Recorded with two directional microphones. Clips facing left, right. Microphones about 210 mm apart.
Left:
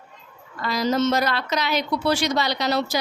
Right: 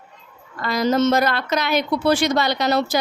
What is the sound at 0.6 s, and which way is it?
A woman's voice, 50° right (ahead or behind).